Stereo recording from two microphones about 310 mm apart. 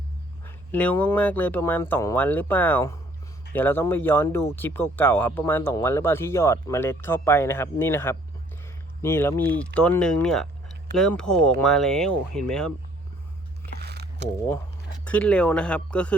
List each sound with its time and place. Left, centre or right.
0.4 s speech: centre
13.6 s biting: right
15.0 s speech: centre